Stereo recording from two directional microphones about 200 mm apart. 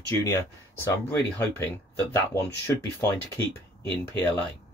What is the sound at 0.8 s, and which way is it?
Speech, 10° left (ahead or behind).